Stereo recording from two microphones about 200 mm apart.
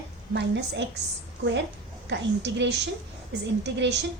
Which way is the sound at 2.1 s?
60° right (ahead or behind).